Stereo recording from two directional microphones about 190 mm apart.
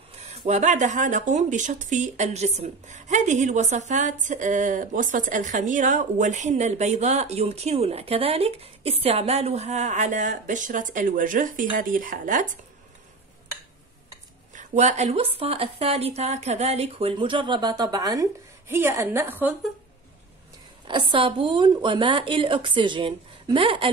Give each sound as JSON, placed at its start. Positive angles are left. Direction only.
{"t": 0.1, "sound": "speech", "side_deg": -35}
{"t": 14.5, "sound": "speech", "side_deg": -40}
{"t": 20.8, "sound": "a woman's voice", "side_deg": -25}